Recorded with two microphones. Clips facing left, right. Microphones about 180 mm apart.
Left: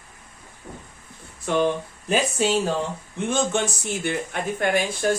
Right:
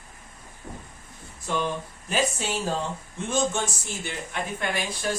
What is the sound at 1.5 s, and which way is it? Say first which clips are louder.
Speech: left 7 dB; 60° left (ahead or behind).